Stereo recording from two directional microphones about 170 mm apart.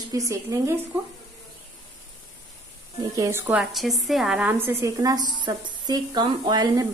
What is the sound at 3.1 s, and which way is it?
Speech, 20° right (ahead or behind).